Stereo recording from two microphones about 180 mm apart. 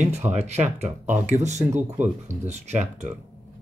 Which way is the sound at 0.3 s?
40° right (ahead or behind).